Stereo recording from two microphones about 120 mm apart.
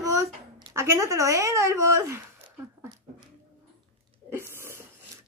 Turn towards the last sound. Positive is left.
turn(degrees=-20)  # may be behind; listen again after turning